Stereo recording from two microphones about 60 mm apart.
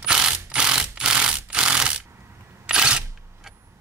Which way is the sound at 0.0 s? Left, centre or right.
Centre.